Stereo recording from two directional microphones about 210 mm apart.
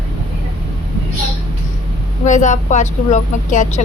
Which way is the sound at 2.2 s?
35° left (ahead or behind).